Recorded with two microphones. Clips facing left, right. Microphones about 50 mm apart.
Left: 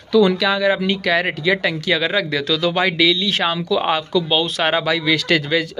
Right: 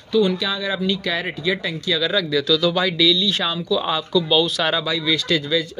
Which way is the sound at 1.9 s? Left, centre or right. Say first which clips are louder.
Left 1 dB; left.